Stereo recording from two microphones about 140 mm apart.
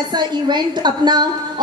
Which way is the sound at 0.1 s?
30° right (ahead or behind).